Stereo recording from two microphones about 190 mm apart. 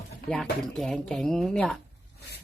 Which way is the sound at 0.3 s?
5° left (ahead or behind).